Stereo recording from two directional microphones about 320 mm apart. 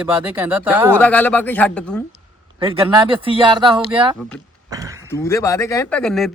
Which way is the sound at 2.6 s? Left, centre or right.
Centre.